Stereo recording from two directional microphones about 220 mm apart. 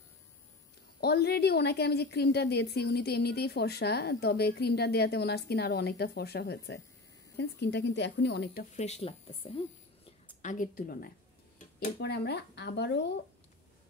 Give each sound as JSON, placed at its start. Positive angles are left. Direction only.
{"t": 1.0, "sound": "a woman's voice", "side_deg": 45}
{"t": 8.7, "sound": "speech", "side_deg": 30}
{"t": 10.4, "sound": "a sound", "side_deg": 35}
{"t": 12.0, "sound": "a woman's voice", "side_deg": 50}